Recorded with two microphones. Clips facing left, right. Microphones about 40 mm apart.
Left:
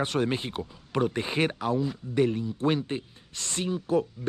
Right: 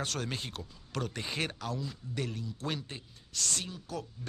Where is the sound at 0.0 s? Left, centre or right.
Left.